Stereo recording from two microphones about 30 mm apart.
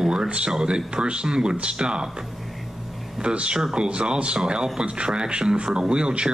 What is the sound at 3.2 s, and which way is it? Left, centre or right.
A man's voice, right.